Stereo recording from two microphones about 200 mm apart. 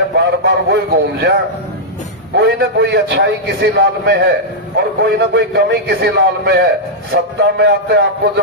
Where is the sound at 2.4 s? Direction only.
55° right (ahead or behind).